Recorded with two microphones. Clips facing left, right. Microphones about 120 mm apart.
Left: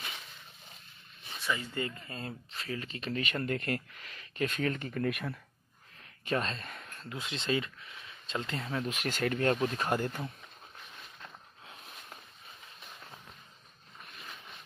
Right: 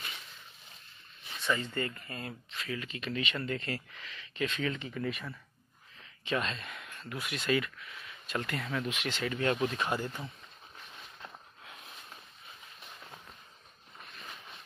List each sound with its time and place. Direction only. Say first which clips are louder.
1.4 s speech: right 2 dB; 10° left (ahead or behind); by 5.4 s 60° left (ahead or behind)
6.2 s speech: left 1 dB; 40° left (ahead or behind)
8.9 s speech: left 3 dB; 45° left (ahead or behind)